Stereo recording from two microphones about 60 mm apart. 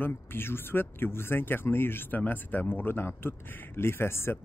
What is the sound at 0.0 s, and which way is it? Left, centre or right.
A man's voice, left.